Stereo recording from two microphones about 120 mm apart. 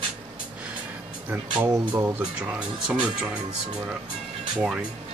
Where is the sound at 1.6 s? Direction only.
20° right (ahead or behind).